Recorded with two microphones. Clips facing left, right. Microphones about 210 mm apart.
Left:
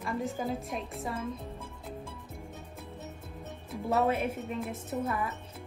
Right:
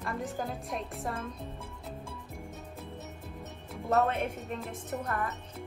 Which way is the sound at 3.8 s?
5° left (ahead or behind).